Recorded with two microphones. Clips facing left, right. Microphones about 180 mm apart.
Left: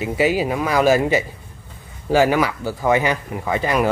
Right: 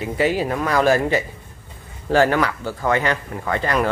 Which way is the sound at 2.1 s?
5° left (ahead or behind).